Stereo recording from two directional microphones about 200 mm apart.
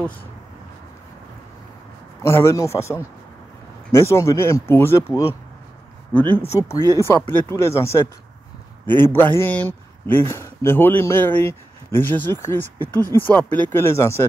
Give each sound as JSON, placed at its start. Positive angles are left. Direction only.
{"t": 2.2, "sound": "a man's voice", "side_deg": 15}
{"t": 6.3, "sound": "a man's voice", "side_deg": 15}
{"t": 6.8, "sound": "speech", "side_deg": -20}
{"t": 7.1, "sound": "a man's voice", "side_deg": 10}